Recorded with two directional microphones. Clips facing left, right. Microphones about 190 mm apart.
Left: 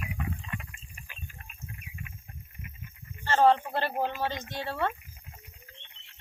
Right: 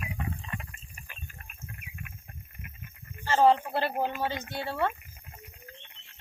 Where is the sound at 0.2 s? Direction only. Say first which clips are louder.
Even; 35° right (ahead or behind).